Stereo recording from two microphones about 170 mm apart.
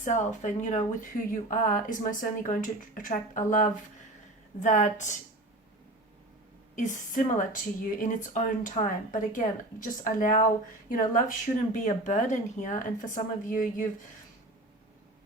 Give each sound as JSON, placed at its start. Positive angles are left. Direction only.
{"t": 0.0, "sound": "speech", "side_deg": 45}
{"t": 6.7, "sound": "speech", "side_deg": 50}